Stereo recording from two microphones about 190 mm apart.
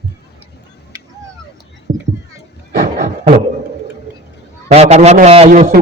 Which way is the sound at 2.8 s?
45° right (ahead or behind).